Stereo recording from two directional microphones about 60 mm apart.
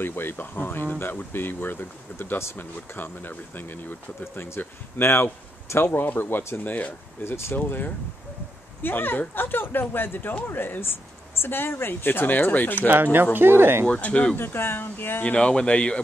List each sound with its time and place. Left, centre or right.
0.0 s speech: left
4.2 s speech: left
7.2 s speech: left
7.5 s speech: left
12.9 s speech: right
13.8 s speech: left
14.3 s speech: left
15.3 s speech: centre